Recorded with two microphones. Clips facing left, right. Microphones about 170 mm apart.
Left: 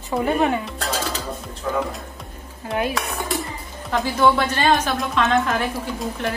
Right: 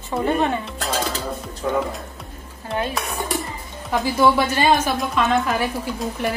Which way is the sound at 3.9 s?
10° right (ahead or behind).